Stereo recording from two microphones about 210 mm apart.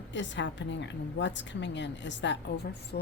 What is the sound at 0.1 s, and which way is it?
A woman's voice, 60° left (ahead or behind).